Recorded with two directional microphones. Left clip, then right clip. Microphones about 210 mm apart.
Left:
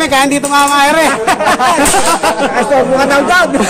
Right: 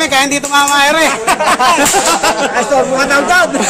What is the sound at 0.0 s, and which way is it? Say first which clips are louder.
Speech: left 1 dB; 5° left (ahead or behind).